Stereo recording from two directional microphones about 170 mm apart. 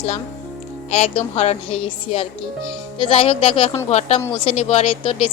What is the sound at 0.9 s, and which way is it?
A woman's voice, 40° left (ahead or behind).